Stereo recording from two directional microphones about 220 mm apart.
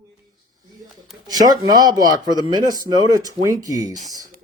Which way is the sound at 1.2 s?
15° right (ahead or behind).